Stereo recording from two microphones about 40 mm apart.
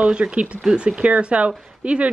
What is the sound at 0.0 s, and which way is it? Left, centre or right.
Speech, right.